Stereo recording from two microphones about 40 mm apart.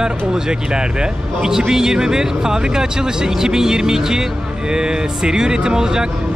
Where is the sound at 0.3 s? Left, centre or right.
Centre.